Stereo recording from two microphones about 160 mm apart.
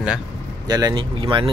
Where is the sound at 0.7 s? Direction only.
25° right (ahead or behind).